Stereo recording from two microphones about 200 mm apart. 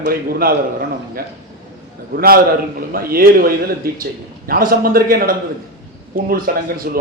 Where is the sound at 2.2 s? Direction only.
50° right (ahead or behind).